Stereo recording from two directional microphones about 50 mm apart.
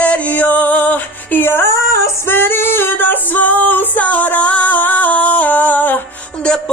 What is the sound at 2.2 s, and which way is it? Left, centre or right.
Female singing, left.